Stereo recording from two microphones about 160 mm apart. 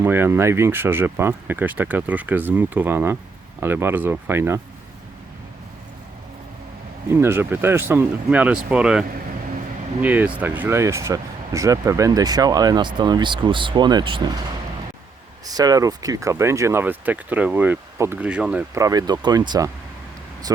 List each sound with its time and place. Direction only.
0.0 s speech: 15° right (ahead or behind)
7.1 s speech: 15° right (ahead or behind)
15.4 s speech: 25° right (ahead or behind); by 18.6 s 5° right (ahead or behind)
18.7 s speech: 20° right (ahead or behind)